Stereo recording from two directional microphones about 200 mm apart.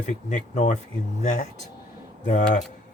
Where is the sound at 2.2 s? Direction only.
40° left (ahead or behind).